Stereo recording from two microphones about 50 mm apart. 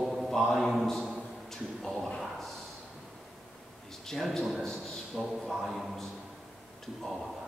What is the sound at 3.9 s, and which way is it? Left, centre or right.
A man's voice, centre.